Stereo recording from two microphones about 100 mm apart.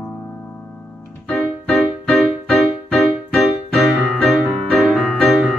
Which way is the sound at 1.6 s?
Centre (ahead or behind).